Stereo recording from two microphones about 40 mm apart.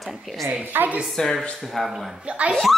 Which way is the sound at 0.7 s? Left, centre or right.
Right.